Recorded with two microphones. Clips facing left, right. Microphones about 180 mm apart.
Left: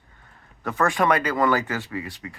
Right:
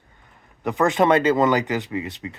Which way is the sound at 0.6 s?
20° right (ahead or behind).